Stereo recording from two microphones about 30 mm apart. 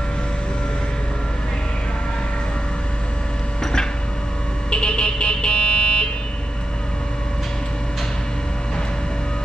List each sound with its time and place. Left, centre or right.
4.6 s vehicle: left